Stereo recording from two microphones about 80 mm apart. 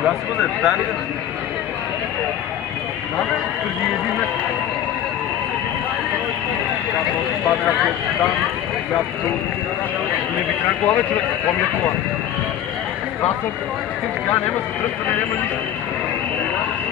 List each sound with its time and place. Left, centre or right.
0.0 s a man's voice: centre
7.4 s a man's voice: centre
10.6 s a man's voice: centre
14.3 s speech: left